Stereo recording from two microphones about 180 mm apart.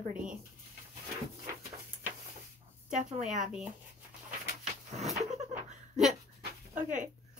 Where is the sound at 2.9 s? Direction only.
45° right (ahead or behind).